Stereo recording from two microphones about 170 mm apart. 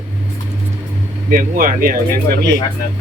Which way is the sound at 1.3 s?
55° right (ahead or behind).